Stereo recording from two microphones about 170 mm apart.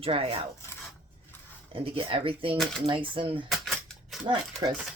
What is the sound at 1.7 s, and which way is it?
Speech, 35° right (ahead or behind).